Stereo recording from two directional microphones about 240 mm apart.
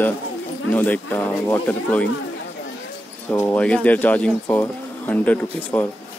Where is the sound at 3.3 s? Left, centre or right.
Centre.